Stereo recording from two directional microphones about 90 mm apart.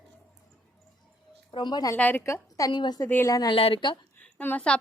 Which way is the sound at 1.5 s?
55° left (ahead or behind).